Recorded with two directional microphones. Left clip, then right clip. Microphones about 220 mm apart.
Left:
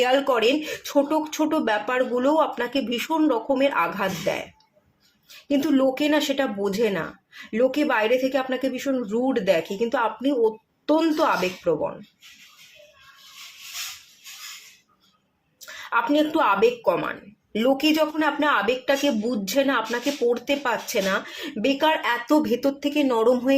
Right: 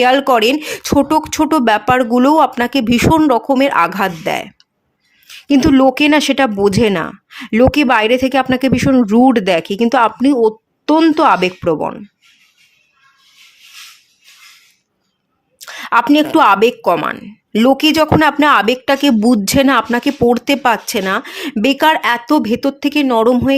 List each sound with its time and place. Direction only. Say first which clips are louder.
0.0 s speech: right 9 dB; 40° right (ahead or behind)
5.5 s speech: right 11 dB; 45° right (ahead or behind)
15.5 s speech: right 11 dB; 50° right (ahead or behind)